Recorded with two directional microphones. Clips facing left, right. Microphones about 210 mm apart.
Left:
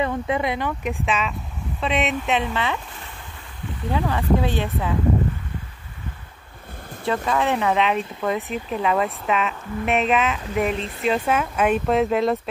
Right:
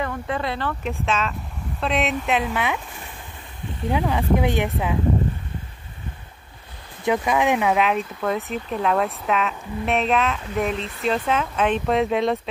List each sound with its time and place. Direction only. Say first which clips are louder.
0.0 s speech: left 3 dB; 15° left (ahead or behind)
1.0 s speech: right 2 dB; centre (ahead or behind); by 4.9 s 15° right (ahead or behind)
7.2 s speech: even; 15° right (ahead or behind); by 12.4 s centre (ahead or behind)